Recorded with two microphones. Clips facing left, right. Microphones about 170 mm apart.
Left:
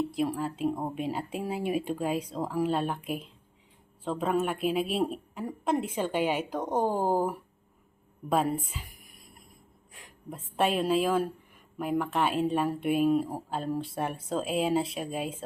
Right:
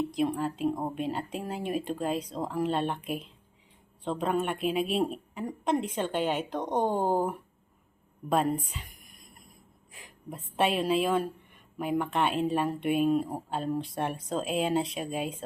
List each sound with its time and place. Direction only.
0.1 s a woman's voice: 5° left (ahead or behind)